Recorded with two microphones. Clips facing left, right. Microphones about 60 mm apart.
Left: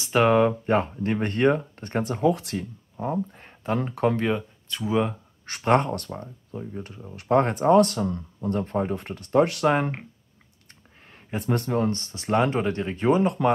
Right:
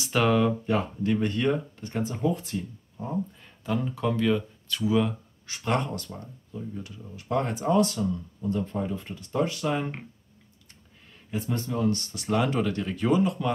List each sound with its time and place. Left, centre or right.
0.0 s speech: left
2.2 s speech: left
3.3 s speech: left
5.4 s speech: left
6.1 s speech: left
7.2 s speech: left
10.7 s speech: left